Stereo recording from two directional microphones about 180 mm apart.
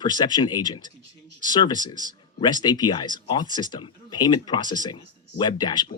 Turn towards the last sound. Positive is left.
turn(degrees=25)  # may be behind; listen again after turning